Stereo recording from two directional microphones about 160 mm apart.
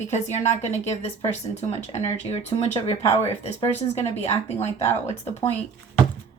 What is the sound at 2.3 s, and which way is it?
Speech, 40° left (ahead or behind).